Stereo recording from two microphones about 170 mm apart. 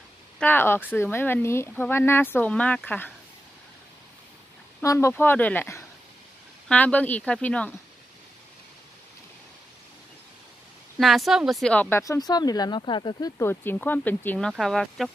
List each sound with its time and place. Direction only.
0.4 s speech: 10° left (ahead or behind)
4.8 s speech: 15° left (ahead or behind)
11.0 s speech: centre (ahead or behind)
12.0 s speech: 20° left (ahead or behind)
13.4 s speech: 10° left (ahead or behind)